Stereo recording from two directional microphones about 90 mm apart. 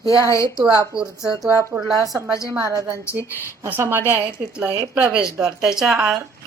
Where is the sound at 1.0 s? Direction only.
5° right (ahead or behind).